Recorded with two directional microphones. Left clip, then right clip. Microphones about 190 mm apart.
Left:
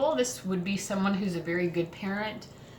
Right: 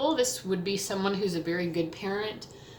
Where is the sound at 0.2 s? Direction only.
45° right (ahead or behind).